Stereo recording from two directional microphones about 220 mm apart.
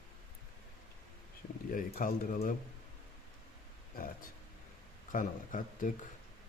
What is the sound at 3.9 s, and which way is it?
Speech, 40° left (ahead or behind).